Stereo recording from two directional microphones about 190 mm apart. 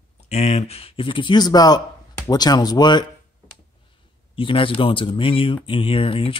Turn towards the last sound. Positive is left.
turn(degrees=30)  # may be behind; listen again after turning